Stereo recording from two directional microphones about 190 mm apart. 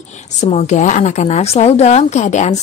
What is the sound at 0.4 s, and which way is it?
Speech, 40° left (ahead or behind).